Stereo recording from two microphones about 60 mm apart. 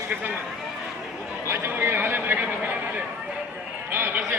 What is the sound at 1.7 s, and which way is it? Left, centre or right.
Speech, right.